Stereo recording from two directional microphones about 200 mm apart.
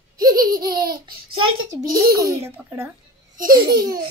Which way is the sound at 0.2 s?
20° right (ahead or behind).